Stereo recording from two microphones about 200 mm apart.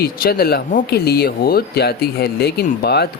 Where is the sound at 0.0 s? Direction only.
50° left (ahead or behind).